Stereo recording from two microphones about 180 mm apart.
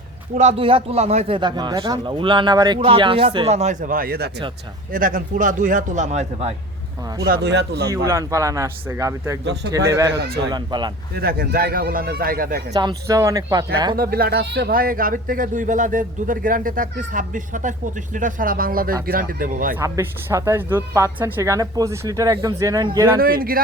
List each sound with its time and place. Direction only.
0.3 s a man's voice: 35° right (ahead or behind)
7.3 s speech: 60° right (ahead or behind)
7.9 s a woman's voice: 15° right (ahead or behind)
10.2 s speech: 60° right (ahead or behind)
10.5 s speech: 25° right (ahead or behind)
11.1 s speech: 60° right (ahead or behind)
12.7 s speech: 20° right (ahead or behind)
13.9 s speech: 55° right (ahead or behind)
19.7 s a woman's voice: 15° right (ahead or behind)
23.2 s speech: 55° right (ahead or behind)